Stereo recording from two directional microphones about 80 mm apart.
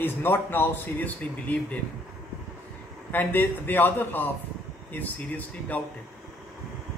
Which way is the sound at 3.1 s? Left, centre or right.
Left.